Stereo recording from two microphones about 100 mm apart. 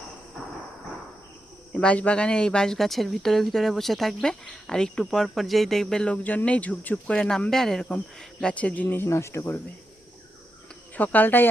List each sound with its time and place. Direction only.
1.7 s speech: 10° left (ahead or behind)
9.0 s speech: 30° left (ahead or behind)
10.9 s speech: 15° left (ahead or behind)